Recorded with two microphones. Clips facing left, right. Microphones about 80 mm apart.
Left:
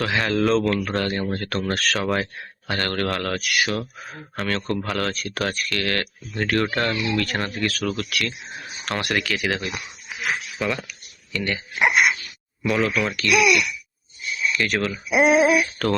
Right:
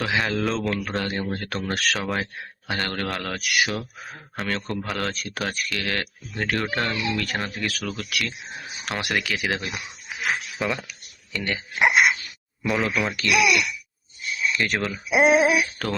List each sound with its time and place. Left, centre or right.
0.0 s speech: centre
2.0 s speech: centre
4.4 s speech: centre
5.1 s speech: right
5.4 s speech: centre
10.2 s speech: centre
10.8 s a sound: right
11.4 s speech: right
12.6 s speech: centre
12.9 s speech: right
14.8 s speech: centre
15.1 s speech: right
15.5 s speech: centre